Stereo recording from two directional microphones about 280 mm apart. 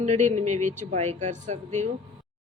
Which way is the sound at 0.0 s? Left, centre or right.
Right.